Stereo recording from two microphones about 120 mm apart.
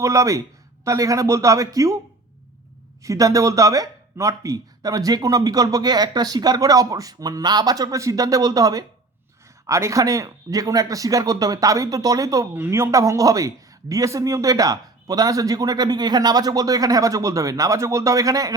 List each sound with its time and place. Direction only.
0.0 s speech: 25° right (ahead or behind)
3.0 s speech: 30° right (ahead or behind)